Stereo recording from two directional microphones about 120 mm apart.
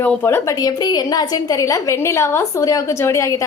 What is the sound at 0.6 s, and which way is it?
A woman's voice, 35° left (ahead or behind).